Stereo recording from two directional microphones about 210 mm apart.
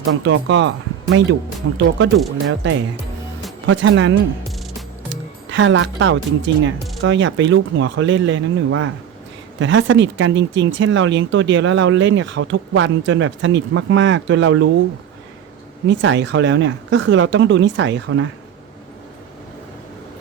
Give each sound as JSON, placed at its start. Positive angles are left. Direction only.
{"t": 0.0, "sound": "speech", "side_deg": -60}
{"t": 1.6, "sound": "speech", "side_deg": -75}
{"t": 5.5, "sound": "speech", "side_deg": -60}
{"t": 15.9, "sound": "speech", "side_deg": -60}